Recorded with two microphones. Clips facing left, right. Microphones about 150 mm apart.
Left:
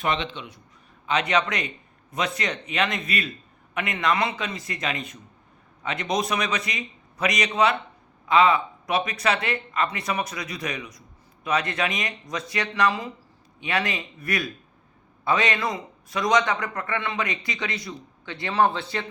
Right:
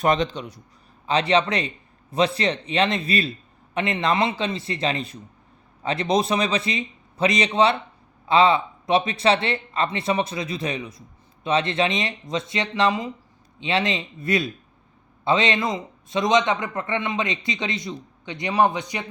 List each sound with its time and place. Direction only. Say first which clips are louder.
0.0 s a man's voice: right 6 dB; 40° right (ahead or behind); by 19.0 s 15° right (ahead or behind)